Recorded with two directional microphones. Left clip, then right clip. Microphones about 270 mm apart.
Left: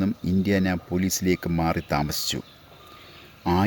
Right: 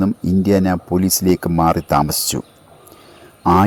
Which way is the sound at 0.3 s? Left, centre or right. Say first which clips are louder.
Right 9 dB; right.